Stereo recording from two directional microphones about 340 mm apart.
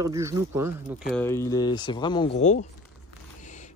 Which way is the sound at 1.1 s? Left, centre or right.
Centre.